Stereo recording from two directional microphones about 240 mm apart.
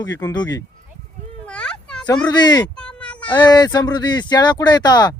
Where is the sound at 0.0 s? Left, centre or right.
Centre.